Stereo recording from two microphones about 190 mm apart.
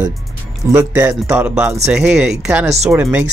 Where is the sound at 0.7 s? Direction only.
10° right (ahead or behind).